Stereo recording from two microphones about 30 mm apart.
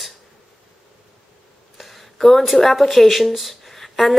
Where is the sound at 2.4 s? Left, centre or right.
Centre.